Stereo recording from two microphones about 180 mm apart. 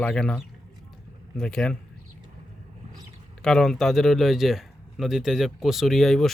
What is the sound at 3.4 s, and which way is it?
Speech, 5° left (ahead or behind).